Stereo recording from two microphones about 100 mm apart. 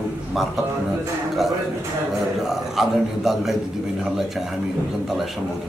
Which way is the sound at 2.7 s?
5° right (ahead or behind).